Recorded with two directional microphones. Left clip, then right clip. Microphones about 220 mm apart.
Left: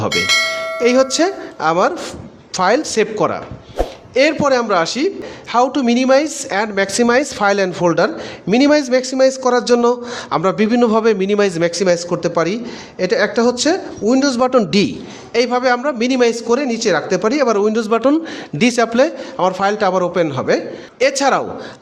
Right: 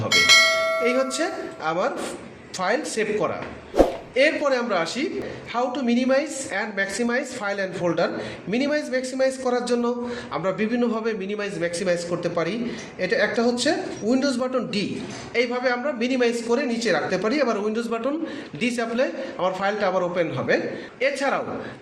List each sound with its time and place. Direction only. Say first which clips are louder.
0.1 s church bell: right 2 dB; centre (ahead or behind)
0.8 s a woman's voice: left 9 dB; 50° left (ahead or behind)